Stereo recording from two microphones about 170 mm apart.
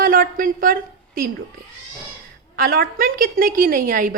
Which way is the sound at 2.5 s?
60° right (ahead or behind).